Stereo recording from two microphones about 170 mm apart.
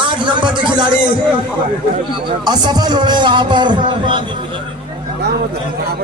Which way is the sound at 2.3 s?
25° right (ahead or behind).